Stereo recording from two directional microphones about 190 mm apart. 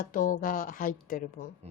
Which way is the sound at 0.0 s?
45° left (ahead or behind).